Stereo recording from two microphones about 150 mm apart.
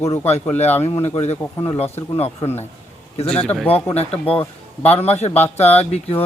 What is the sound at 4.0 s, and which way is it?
Speech, 45° left (ahead or behind).